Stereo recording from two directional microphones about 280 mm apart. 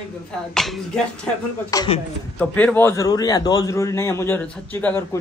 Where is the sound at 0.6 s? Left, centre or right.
Centre.